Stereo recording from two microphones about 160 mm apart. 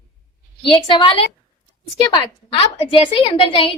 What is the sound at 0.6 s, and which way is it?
Speech, 30° left (ahead or behind).